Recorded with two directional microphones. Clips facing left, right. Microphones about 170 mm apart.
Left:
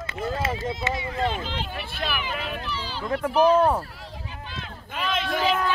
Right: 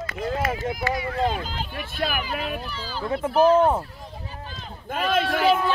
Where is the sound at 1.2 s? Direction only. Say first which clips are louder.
Even; 40° right (ahead or behind).